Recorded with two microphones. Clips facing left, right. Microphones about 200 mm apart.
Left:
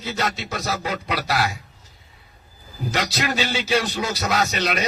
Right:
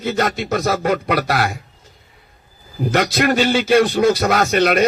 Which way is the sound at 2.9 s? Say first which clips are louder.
Right 8 dB; 55° right (ahead or behind).